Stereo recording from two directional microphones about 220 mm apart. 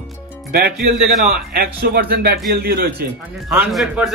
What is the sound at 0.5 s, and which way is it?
Speech, 40° right (ahead or behind).